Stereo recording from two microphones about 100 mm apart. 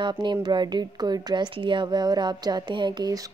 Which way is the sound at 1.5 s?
55° right (ahead or behind).